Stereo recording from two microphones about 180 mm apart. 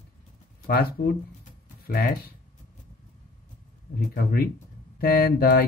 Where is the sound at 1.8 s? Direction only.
55° left (ahead or behind).